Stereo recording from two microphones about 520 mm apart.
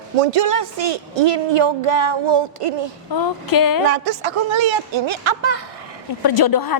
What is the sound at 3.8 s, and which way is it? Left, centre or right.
Speech, right.